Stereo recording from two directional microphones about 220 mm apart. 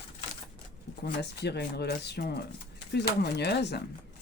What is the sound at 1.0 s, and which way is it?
Speech, 50° left (ahead or behind).